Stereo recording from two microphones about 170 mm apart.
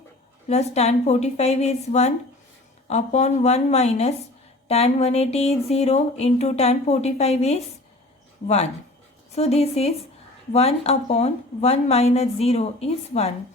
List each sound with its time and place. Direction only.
0.4 s speech: 40° left (ahead or behind)